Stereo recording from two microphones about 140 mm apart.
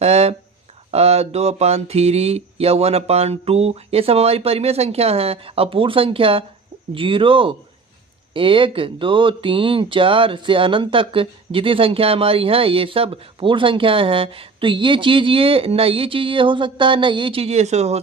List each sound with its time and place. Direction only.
0.0 s a sound: 50° right (ahead or behind)
0.9 s mantra: 45° right (ahead or behind)
6.9 s speech: 40° right (ahead or behind)